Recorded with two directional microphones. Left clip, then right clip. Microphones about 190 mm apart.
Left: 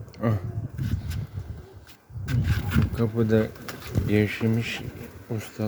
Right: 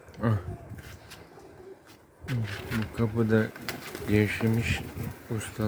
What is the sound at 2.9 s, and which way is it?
Speech, 15° left (ahead or behind).